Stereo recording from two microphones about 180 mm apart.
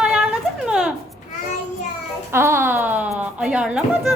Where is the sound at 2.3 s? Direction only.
15° right (ahead or behind).